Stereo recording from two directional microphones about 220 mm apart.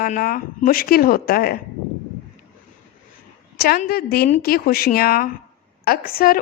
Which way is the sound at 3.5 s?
45° left (ahead or behind).